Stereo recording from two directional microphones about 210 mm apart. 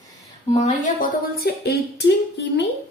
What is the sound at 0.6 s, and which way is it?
Speech, 45° left (ahead or behind).